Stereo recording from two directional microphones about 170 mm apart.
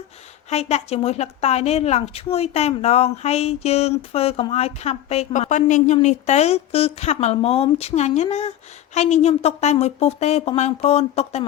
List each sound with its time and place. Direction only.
0.5 s a woman's voice: 40° left (ahead or behind)